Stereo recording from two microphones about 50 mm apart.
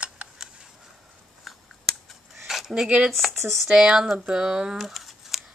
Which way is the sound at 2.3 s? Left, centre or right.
Centre.